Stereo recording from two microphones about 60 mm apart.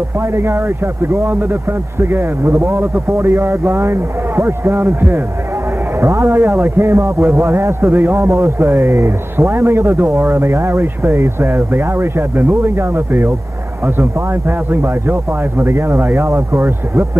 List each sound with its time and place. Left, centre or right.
1.0 s a man's voice: right
5.9 s a man's voice: right
7.9 s speech: right
8.3 s a man's voice: right
11.7 s a man's voice: right
14.7 s speech: right
15.6 s a man's voice: right